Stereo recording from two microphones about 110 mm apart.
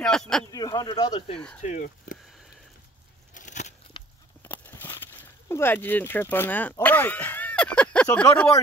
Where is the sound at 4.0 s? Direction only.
45° left (ahead or behind).